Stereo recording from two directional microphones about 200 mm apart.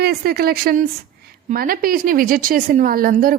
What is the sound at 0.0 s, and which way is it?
A woman's voice, 50° right (ahead or behind).